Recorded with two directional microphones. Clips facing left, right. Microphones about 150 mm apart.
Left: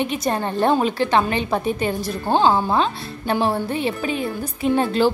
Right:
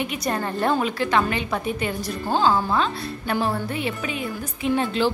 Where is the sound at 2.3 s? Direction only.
20° left (ahead or behind).